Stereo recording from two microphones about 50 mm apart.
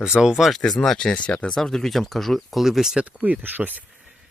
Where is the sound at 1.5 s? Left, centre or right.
Centre.